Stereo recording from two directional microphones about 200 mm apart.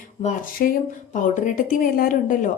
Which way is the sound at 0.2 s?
40° left (ahead or behind).